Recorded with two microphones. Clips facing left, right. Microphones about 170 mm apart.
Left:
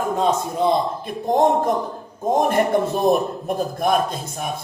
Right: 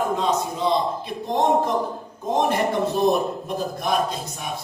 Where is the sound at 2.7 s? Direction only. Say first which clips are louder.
Left 2 dB; 50° left (ahead or behind).